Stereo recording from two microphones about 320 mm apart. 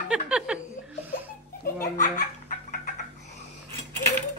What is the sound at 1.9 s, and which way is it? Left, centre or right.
Belly laugh, left.